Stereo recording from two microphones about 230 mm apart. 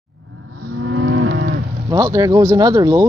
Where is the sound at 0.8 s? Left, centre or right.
Right.